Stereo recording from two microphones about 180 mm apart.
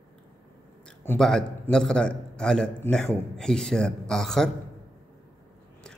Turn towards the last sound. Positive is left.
turn(degrees=5)  # may be behind; listen again after turning